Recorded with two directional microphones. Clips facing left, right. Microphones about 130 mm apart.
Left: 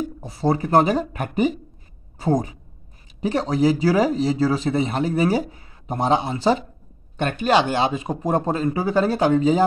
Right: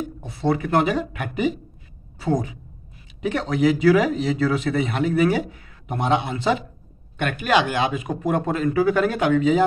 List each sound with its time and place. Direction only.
0.2 s speech: 35° left (ahead or behind)